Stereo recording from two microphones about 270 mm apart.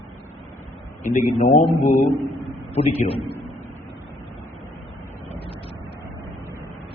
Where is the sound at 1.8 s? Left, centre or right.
Left.